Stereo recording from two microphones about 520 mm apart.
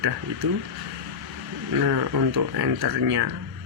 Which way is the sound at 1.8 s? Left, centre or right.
Right.